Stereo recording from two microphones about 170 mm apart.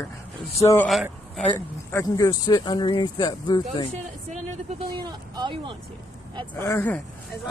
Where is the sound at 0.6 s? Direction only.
15° left (ahead or behind).